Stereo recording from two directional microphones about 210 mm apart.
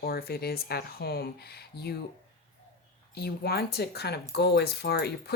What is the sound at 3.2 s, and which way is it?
Speech, 50° left (ahead or behind).